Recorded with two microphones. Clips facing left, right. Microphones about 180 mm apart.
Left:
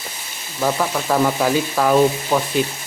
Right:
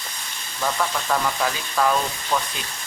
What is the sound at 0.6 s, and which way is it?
Speech, 15° left (ahead or behind).